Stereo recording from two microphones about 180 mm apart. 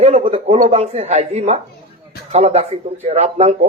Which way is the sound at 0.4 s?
40° right (ahead or behind).